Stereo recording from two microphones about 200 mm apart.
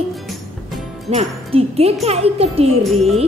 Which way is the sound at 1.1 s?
30° right (ahead or behind).